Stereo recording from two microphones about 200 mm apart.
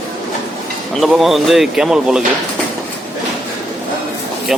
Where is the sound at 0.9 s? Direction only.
Centre (ahead or behind).